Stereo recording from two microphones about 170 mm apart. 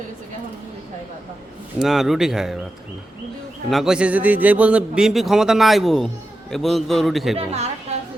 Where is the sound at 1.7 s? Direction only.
Centre (ahead or behind).